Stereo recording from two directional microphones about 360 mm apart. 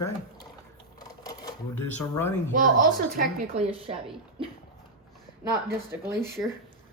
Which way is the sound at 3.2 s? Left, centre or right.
Right.